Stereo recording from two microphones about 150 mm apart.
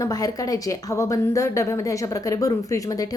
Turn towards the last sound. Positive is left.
turn(degrees=25)  # may be behind; listen again after turning